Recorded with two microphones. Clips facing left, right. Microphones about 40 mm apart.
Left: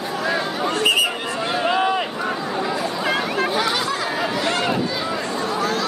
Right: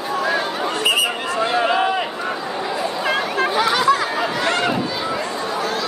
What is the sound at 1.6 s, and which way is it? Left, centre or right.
Run, centre.